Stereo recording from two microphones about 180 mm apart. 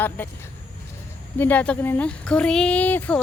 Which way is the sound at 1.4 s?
10° left (ahead or behind).